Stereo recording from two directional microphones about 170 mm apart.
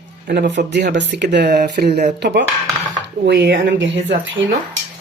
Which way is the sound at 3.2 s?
75° right (ahead or behind).